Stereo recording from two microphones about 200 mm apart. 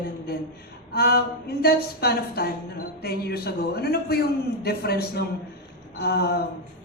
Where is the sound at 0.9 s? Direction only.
50° left (ahead or behind).